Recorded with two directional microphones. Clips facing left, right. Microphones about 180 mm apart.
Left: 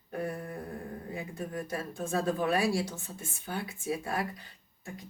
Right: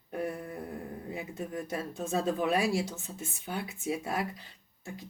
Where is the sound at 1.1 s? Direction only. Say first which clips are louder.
Even; 20° right (ahead or behind).